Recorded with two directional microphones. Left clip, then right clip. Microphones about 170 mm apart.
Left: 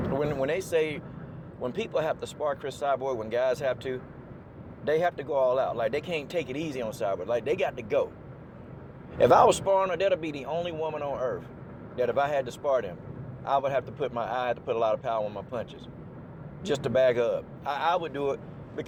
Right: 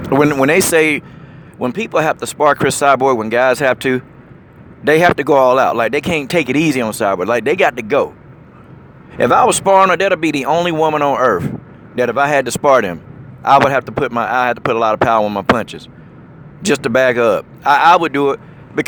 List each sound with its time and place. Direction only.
0.0 s speech: 50° right (ahead or behind)
9.1 s speech: 30° right (ahead or behind)
9.8 s speech: 50° right (ahead or behind)